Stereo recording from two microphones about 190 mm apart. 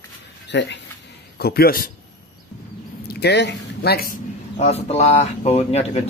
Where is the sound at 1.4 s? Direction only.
55° left (ahead or behind).